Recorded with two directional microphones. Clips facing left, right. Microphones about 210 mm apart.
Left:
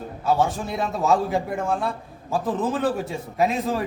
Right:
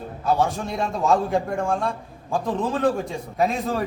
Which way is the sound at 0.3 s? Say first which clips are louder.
Even; centre (ahead or behind).